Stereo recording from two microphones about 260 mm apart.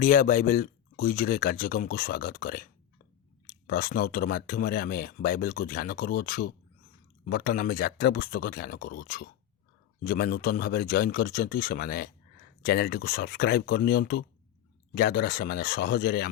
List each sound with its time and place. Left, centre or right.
0.0 s speech: left
3.7 s speech: left